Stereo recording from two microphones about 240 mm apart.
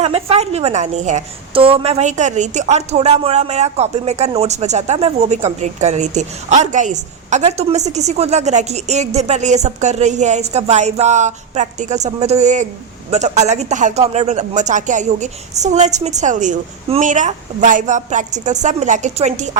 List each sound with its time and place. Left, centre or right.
0.0 s a woman's voice: right